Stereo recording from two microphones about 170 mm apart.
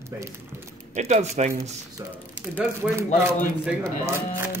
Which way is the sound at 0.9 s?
40° right (ahead or behind).